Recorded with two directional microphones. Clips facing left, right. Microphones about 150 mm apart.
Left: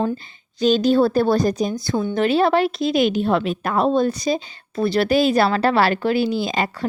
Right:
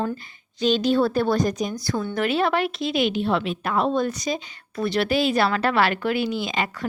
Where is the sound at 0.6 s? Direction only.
40° left (ahead or behind); by 2.2 s 20° left (ahead or behind).